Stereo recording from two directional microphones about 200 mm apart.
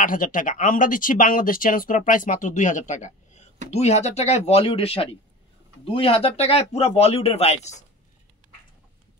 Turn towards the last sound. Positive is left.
turn(degrees=35)  # may be behind; listen again after turning